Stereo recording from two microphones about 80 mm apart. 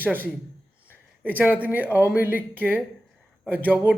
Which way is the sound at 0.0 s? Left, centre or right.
Right.